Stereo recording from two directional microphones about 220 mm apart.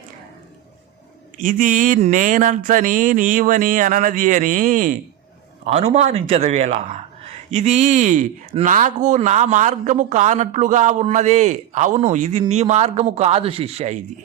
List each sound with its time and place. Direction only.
1.4 s a man's voice: 35° right (ahead or behind)